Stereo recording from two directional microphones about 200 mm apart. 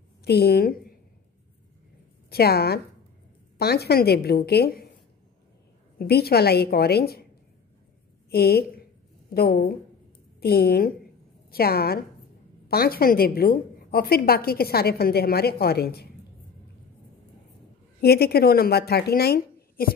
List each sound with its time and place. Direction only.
0.2 s a woman's voice: 55° left (ahead or behind)
2.2 s a woman's voice: 50° left (ahead or behind)
5.9 s a woman's voice: 50° left (ahead or behind)
8.3 s a woman's voice: 50° left (ahead or behind)
18.0 s a woman's voice: 50° left (ahead or behind)